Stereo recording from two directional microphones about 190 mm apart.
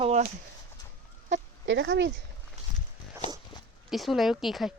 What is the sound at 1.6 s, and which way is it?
Speech, 70° right (ahead or behind).